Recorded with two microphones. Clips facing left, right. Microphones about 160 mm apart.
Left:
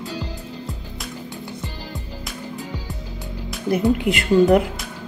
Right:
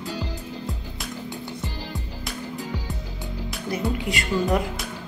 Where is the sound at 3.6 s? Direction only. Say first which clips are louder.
Left 8 dB; 60° left (ahead or behind).